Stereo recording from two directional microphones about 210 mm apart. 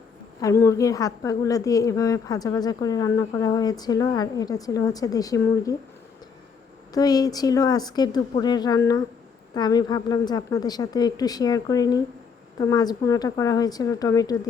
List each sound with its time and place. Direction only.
0.4 s a woman's voice: 15° left (ahead or behind)
6.9 s a woman's voice: 20° left (ahead or behind)